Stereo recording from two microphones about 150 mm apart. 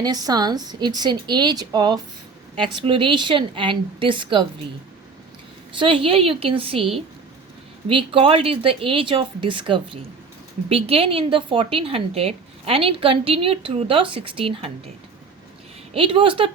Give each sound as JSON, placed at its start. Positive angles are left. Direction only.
{"t": 0.0, "sound": "a woman's voice", "side_deg": -25}
{"t": 5.8, "sound": "a woman's voice", "side_deg": -40}
{"t": 16.0, "sound": "a woman's voice", "side_deg": -35}